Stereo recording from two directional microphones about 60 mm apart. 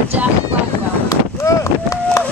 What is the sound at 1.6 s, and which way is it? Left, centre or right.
Run, left.